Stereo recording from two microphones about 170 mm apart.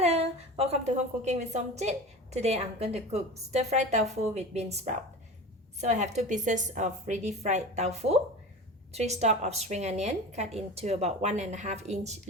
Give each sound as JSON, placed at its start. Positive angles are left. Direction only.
{"t": 0.0, "sound": "a woman's voice", "side_deg": -35}